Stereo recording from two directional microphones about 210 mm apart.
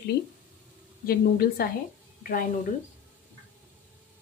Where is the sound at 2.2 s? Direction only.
40° left (ahead or behind).